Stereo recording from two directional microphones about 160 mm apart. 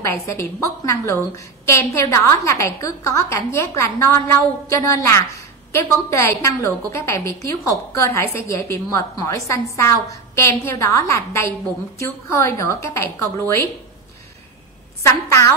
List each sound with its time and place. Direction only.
0.0 s a woman's voice: 20° left (ahead or behind)
15.0 s a woman's voice: 20° left (ahead or behind)